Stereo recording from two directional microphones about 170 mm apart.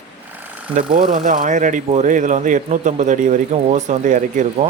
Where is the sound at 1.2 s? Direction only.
50° right (ahead or behind).